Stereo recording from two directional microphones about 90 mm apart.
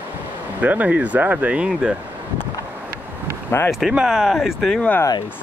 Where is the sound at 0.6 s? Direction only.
15° right (ahead or behind).